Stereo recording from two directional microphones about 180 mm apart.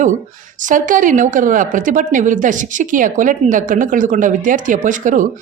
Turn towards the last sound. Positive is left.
turn(degrees=-45)  # may be behind; listen again after turning